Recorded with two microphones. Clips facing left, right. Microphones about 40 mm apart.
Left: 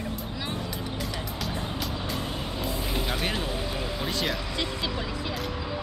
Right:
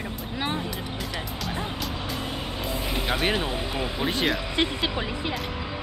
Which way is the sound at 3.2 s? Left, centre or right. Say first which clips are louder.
Right 4 dB; right.